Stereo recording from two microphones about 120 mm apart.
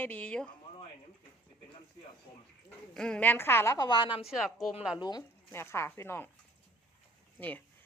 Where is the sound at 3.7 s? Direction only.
35° left (ahead or behind).